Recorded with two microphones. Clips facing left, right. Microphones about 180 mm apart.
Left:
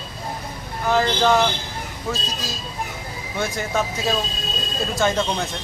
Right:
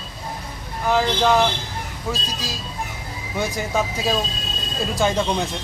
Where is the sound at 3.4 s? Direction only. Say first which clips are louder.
Right 1 dB; 10° right (ahead or behind).